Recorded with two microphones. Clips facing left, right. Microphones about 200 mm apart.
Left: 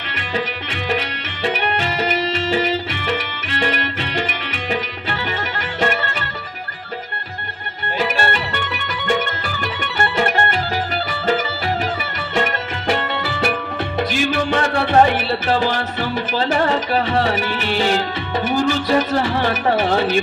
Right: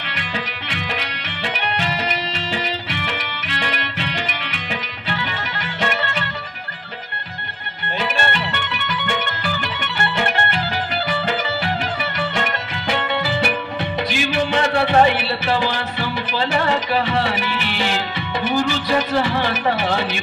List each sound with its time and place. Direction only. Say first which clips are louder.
1.4 s music: left 4 dB; 45° left (ahead or behind)
5.8 s music: left 2 dB; 45° left (ahead or behind)
9.6 s music: left 3 dB; 40° left (ahead or behind)
12.9 s music: right 2 dB; 40° left (ahead or behind)
13.9 s speech: left 2 dB; 45° left (ahead or behind)